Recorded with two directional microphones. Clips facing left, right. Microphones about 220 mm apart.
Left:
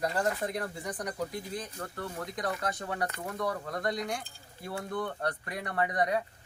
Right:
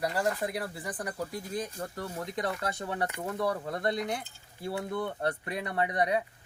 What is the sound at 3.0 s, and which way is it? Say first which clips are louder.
Speech: right 3 dB; 15° right (ahead or behind).